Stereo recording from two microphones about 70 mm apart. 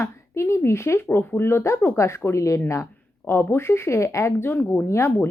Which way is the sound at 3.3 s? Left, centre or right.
Left.